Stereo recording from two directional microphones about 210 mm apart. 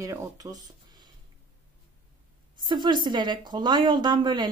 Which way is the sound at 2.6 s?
20° right (ahead or behind).